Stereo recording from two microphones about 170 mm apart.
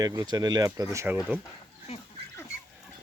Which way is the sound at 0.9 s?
10° right (ahead or behind).